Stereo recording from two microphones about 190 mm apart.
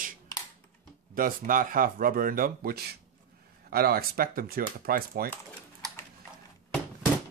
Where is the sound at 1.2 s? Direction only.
45° right (ahead or behind).